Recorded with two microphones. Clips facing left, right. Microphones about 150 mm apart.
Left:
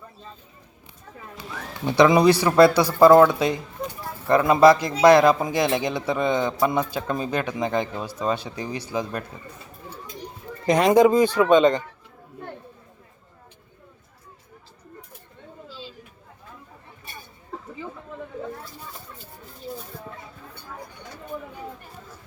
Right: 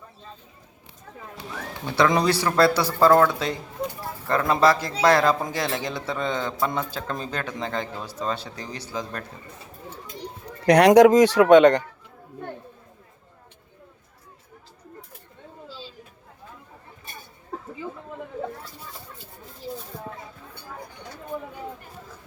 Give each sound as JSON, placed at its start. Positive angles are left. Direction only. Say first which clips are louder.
{"t": 1.9, "sound": "a man's voice", "louder": "left 5 dB", "side_deg": 15}
{"t": 10.7, "sound": "speech", "louder": "right 3 dB", "side_deg": -75}